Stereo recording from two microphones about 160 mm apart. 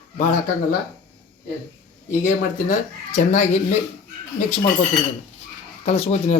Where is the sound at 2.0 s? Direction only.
55° left (ahead or behind).